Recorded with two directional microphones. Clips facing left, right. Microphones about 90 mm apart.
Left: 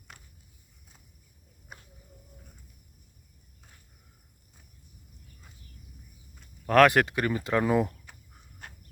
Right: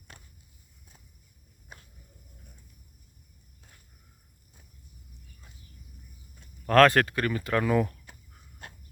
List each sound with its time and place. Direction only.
6.7 s speech: 15° left (ahead or behind)